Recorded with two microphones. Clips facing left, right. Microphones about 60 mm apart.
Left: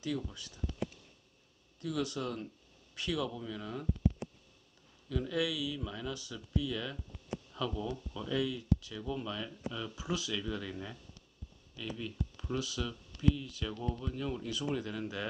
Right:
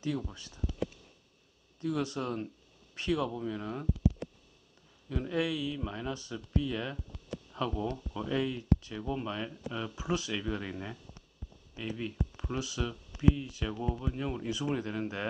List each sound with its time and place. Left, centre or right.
0.0 s speech: right
1.8 s speech: right
5.0 s speech: right
13.7 s speech: centre
14.1 s speech: right